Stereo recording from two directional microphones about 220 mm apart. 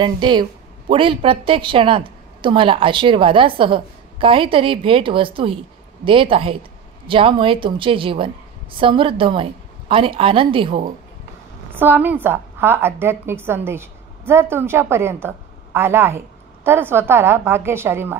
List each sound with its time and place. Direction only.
0.0 s a woman's voice: 20° right (ahead or behind)
11.7 s a woman's voice: 10° right (ahead or behind)